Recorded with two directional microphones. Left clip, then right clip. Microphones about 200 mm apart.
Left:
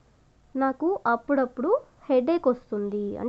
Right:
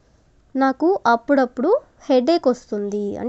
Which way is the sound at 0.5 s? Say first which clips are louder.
Right 7 dB; 30° right (ahead or behind).